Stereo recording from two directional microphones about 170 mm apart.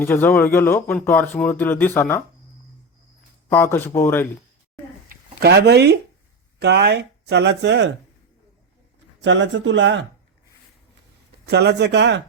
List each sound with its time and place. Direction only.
0.0 s speech: 10° left (ahead or behind)
3.5 s speech: 10° left (ahead or behind)
5.0 s a sound: 70° right (ahead or behind)
6.6 s speech: 75° right (ahead or behind); by 7.9 s 90° right
9.2 s speech: 90° right
11.4 s speech: 80° right